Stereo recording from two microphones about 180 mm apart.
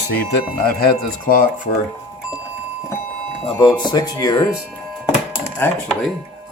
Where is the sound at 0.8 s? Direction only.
50° left (ahead or behind).